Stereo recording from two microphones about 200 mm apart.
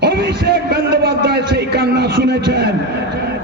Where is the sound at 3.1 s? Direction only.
50° right (ahead or behind).